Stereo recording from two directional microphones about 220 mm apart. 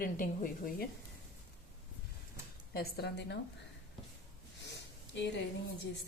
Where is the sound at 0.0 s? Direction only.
40° left (ahead or behind).